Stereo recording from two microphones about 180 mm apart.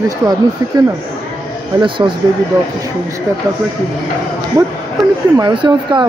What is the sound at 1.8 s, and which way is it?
Speech, 25° right (ahead or behind).